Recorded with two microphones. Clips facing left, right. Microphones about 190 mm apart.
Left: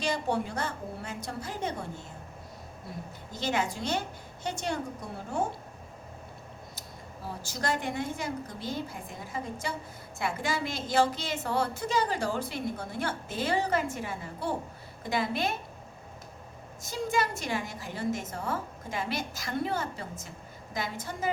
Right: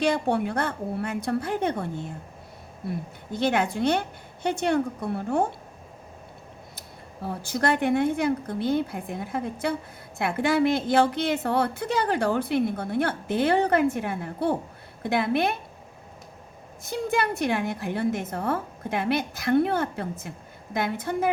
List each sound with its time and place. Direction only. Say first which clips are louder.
0.0 s a woman's voice: right 6 dB; 60° right (ahead or behind)
3.3 s a woman's voice: right 7 dB; 60° right (ahead or behind)
7.3 s a woman's voice: right 7 dB; 60° right (ahead or behind)
16.8 s a woman's voice: right 4 dB; 60° right (ahead or behind)